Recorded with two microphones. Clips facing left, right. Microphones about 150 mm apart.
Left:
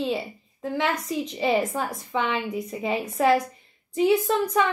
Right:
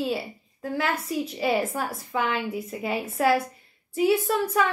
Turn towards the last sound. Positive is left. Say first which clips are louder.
# left 1 dB
turn(degrees=-5)  # may be behind; listen again after turning